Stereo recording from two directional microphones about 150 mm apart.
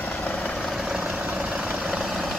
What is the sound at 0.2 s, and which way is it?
Vehicle, 5° left (ahead or behind).